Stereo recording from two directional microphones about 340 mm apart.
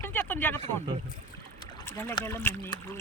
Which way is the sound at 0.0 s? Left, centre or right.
Centre.